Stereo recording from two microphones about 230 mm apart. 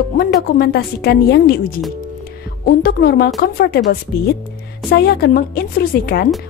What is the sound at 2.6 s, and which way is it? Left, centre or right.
A woman's voice, left.